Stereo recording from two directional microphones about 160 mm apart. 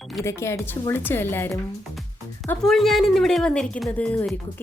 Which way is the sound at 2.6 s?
Centre (ahead or behind).